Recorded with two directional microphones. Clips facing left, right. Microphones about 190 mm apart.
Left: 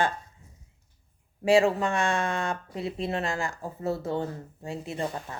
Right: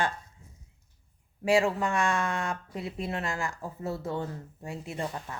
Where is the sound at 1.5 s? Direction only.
25° left (ahead or behind).